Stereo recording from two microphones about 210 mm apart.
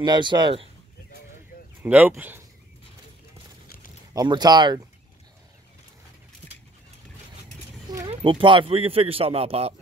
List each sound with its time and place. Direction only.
0.0 s speech: 20° right (ahead or behind)
1.8 s speech: 10° right (ahead or behind)
4.1 s speech: 20° right (ahead or behind)
8.1 s speech: 25° right (ahead or behind)